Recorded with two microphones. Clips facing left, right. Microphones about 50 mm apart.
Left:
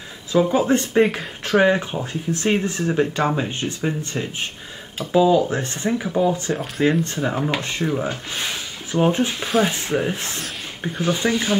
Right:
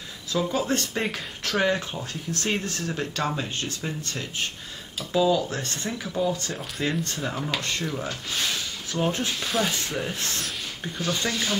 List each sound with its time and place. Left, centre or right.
0.3 s speech: left